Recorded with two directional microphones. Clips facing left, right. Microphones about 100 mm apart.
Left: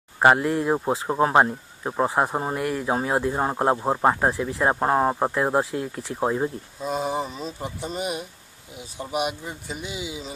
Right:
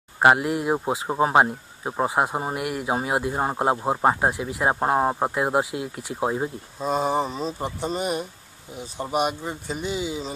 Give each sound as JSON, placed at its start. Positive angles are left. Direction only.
{"t": 0.2, "sound": "speech", "side_deg": -10}
{"t": 6.8, "sound": "speech", "side_deg": -40}